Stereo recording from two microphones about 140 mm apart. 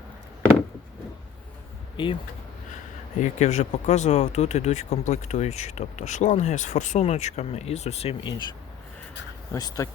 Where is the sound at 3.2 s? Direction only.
55° left (ahead or behind).